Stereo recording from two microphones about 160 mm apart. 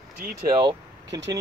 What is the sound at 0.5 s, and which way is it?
Vehicle, 25° right (ahead or behind).